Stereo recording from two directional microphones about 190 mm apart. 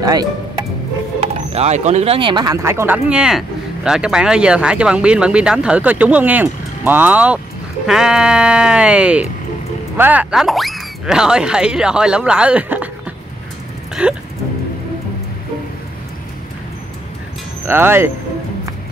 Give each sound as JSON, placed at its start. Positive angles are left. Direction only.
{"t": 0.0, "sound": "speech", "side_deg": -20}
{"t": 1.2, "sound": "speech", "side_deg": -35}
{"t": 14.0, "sound": "speech", "side_deg": -5}
{"t": 17.6, "sound": "speech", "side_deg": -10}